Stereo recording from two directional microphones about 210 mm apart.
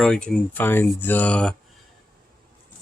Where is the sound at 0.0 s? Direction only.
5° left (ahead or behind).